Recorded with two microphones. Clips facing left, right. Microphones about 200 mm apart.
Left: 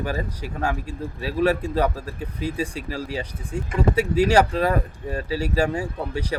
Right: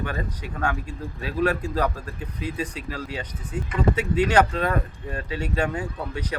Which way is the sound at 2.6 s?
10° left (ahead or behind).